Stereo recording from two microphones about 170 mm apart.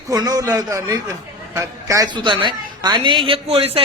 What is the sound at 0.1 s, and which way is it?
A man's voice, 20° right (ahead or behind).